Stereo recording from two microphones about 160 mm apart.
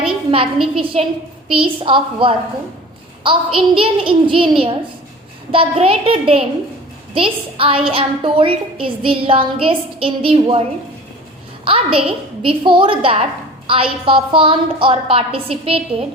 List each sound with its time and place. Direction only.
0.0 s a sound: 35° right (ahead or behind)
0.9 s a woman's voice: 40° right (ahead or behind)
11.6 s a woman's voice: 35° right (ahead or behind)